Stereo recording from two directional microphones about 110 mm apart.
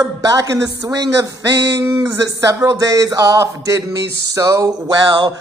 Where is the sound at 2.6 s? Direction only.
30° right (ahead or behind).